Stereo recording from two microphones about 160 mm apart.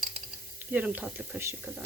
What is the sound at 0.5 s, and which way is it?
Frying, 10° right (ahead or behind).